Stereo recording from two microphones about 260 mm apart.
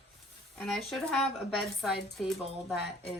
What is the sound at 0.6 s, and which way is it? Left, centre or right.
Speech, centre.